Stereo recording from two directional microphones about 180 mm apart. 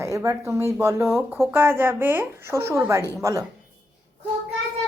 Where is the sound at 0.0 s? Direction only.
15° right (ahead or behind).